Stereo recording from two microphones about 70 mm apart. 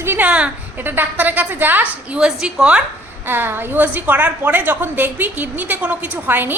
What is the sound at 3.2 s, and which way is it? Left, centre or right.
A woman's voice, right.